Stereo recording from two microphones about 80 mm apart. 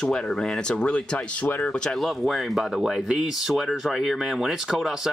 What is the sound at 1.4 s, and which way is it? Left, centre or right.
Speech, left.